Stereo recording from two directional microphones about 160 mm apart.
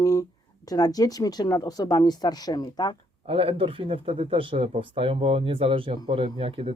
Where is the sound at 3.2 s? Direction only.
35° right (ahead or behind).